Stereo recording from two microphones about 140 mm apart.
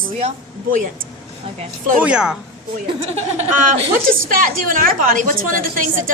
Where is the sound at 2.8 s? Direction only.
50° right (ahead or behind).